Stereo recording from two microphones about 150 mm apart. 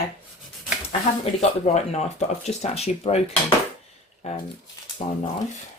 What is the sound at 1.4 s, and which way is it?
Speech, 50° left (ahead or behind).